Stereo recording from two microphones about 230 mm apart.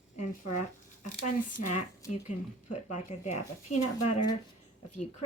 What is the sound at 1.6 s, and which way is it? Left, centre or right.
Speech, left.